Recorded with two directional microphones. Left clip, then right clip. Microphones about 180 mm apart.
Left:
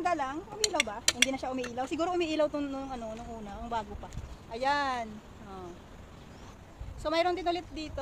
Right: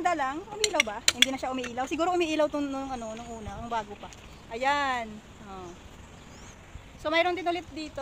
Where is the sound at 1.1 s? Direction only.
20° right (ahead or behind).